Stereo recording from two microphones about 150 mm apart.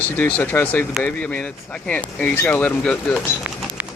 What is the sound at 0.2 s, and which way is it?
Speech, 10° left (ahead or behind).